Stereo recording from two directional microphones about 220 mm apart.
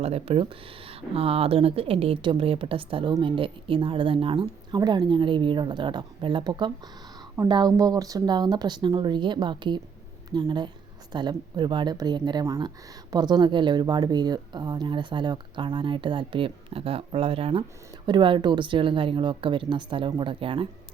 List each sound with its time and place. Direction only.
0.0 s speech: 25° right (ahead or behind)